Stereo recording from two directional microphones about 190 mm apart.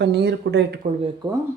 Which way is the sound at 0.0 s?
60° right (ahead or behind).